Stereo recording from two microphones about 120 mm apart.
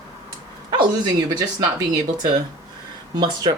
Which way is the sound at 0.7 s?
35° right (ahead or behind).